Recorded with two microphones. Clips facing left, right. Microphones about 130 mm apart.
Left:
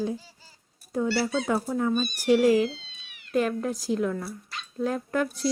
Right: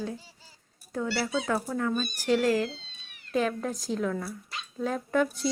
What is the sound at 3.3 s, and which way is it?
Speech, centre (ahead or behind).